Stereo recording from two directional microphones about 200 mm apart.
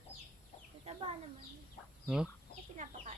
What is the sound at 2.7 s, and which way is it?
Chicken, 35° right (ahead or behind).